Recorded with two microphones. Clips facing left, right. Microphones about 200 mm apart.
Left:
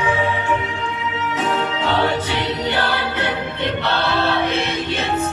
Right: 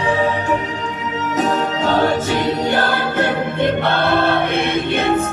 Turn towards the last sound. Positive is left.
turn(degrees=-55)  # may be behind; listen again after turning